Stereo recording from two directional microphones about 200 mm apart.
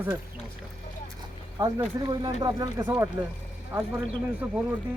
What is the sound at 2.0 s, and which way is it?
Speech, 20° right (ahead or behind).